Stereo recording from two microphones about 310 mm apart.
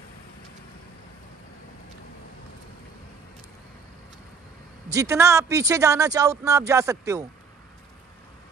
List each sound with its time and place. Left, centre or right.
4.8 s a man's voice: centre